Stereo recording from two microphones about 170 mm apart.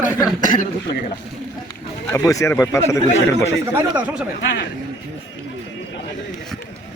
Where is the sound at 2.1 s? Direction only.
20° left (ahead or behind).